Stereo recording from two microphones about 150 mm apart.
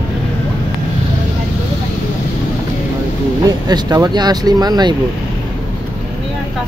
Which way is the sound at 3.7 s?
25° right (ahead or behind).